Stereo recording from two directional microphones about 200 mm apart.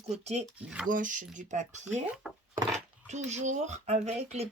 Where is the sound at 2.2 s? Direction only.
Centre (ahead or behind).